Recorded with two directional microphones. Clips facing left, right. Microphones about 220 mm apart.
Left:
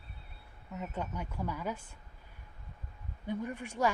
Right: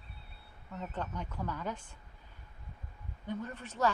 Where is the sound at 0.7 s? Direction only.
10° left (ahead or behind).